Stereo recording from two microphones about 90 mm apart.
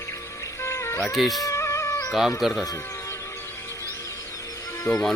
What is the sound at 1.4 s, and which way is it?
Music, 35° left (ahead or behind).